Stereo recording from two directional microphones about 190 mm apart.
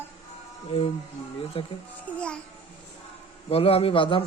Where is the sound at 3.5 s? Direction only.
30° left (ahead or behind).